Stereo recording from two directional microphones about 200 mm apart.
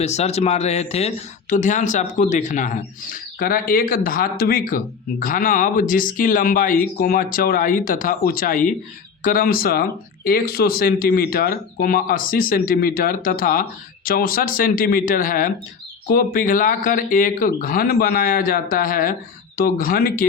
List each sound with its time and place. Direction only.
0.0 s speech: 35° left (ahead or behind)